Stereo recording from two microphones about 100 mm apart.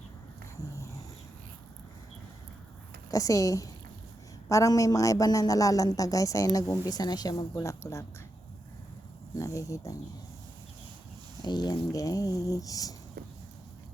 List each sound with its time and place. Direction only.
0.8 s dog: 30° left (ahead or behind)
3.1 s speech: 35° left (ahead or behind)
9.3 s speech: 30° left (ahead or behind)
11.4 s speech: 45° left (ahead or behind)